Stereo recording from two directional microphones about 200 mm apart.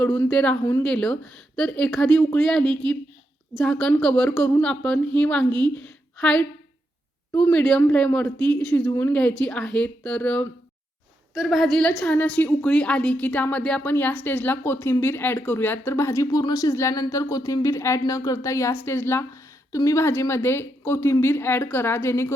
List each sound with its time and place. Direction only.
0.0 s a woman's voice: 5° left (ahead or behind)
5.5 s a woman's voice: 20° right (ahead or behind)
5.7 s a woman's voice: 5° left (ahead or behind)